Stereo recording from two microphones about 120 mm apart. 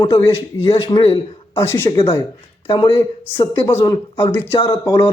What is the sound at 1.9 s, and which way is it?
Speech, 50° left (ahead or behind).